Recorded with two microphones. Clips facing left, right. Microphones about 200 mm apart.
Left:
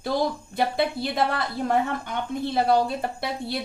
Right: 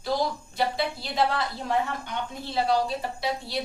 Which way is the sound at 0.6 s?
55° left (ahead or behind).